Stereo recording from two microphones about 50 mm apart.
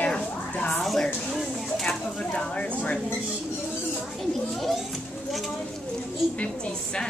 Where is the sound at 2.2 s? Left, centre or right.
Left.